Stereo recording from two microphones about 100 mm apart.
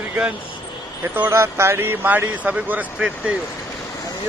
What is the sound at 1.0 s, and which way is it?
A man's voice, 25° right (ahead or behind).